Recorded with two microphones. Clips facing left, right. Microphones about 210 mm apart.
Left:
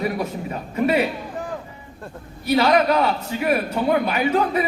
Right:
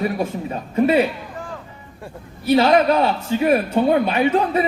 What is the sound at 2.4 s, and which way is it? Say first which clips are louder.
A man's voice: right 3 dB; 25° right (ahead or behind).